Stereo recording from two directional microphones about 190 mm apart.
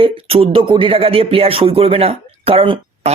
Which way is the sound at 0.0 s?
30° right (ahead or behind).